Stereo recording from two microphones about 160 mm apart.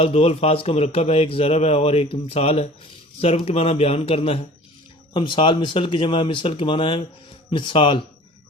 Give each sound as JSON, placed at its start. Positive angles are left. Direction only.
{"t": 0.0, "sound": "speech", "side_deg": 40}